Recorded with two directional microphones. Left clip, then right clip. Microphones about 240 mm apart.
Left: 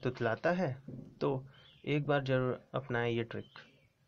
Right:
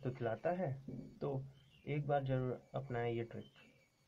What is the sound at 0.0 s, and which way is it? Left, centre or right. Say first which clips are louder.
Speech: left 7 dB; left.